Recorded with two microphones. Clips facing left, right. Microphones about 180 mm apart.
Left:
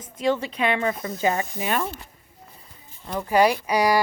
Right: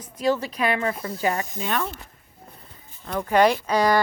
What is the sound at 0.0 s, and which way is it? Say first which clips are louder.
A woman's voice: even; 25° left (ahead or behind).